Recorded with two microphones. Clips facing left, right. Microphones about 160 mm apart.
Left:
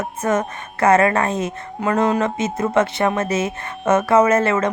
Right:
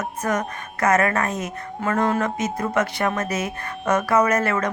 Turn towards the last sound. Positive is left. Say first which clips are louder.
# left 4 dB
turn(degrees=25)  # may be behind; listen again after turning